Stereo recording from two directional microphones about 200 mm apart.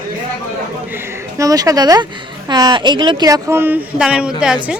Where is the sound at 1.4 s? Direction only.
15° right (ahead or behind).